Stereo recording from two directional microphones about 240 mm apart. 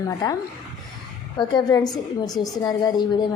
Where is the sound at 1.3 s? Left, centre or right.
Centre.